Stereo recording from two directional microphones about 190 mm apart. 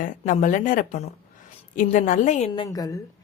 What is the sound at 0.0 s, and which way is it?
A woman's voice, 40° left (ahead or behind).